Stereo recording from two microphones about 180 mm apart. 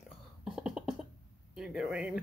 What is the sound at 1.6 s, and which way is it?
Speech, 5° right (ahead or behind).